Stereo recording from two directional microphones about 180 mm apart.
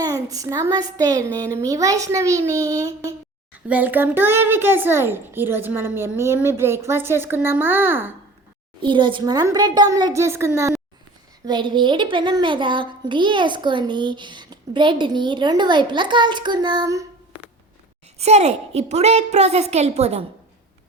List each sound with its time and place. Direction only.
0.0 s a child's voice: 20° right (ahead or behind)
8.8 s a child's voice: 25° right (ahead or behind)
11.4 s a child's voice: 25° right (ahead or behind)
18.2 s a woman's voice: 35° right (ahead or behind)